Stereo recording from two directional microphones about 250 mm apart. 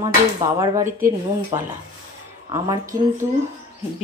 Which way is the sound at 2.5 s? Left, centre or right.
Centre.